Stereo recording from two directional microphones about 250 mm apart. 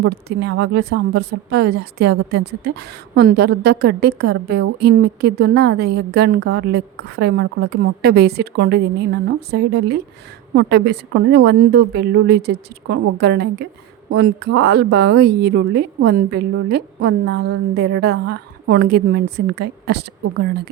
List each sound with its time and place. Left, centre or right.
0.0 s a woman's voice: right